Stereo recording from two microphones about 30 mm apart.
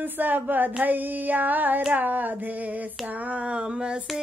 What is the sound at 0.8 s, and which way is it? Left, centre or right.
Female singing, right.